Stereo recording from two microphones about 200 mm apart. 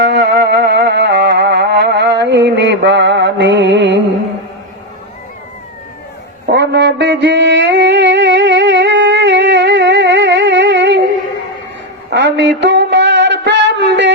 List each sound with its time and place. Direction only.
0.0 s music: 60° right (ahead or behind)
6.4 s mantra: 60° right (ahead or behind)
12.1 s a sound: 60° right (ahead or behind)